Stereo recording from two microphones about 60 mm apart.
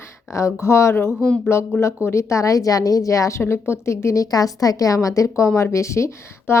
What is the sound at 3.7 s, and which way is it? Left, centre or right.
Speech, left.